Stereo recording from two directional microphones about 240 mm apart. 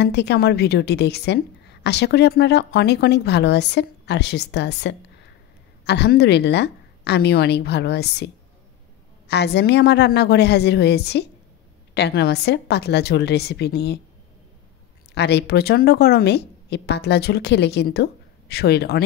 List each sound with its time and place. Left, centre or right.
0.0 s a woman's voice: left
9.3 s a woman's voice: left
15.1 s a woman's voice: left